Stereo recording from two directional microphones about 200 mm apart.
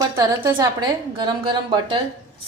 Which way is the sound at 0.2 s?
20° right (ahead or behind).